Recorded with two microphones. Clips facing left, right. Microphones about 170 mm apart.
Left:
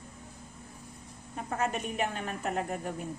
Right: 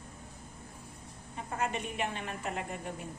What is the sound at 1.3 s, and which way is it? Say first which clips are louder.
A woman's voice: left 3 dB; 45° left (ahead or behind).